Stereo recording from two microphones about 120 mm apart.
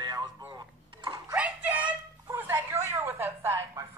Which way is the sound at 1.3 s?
10° right (ahead or behind).